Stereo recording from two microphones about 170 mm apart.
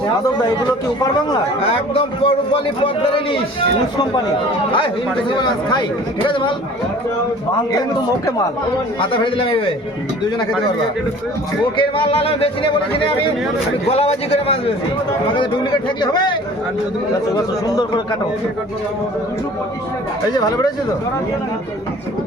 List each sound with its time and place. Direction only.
1.6 s a man's voice: 35° left (ahead or behind)
5.3 s speech: 25° left (ahead or behind)
9.0 s a man's voice: 30° left (ahead or behind)
11.8 s a man's voice: 30° left (ahead or behind)
17.3 s speech: 25° left (ahead or behind)
20.3 s speech: 25° left (ahead or behind)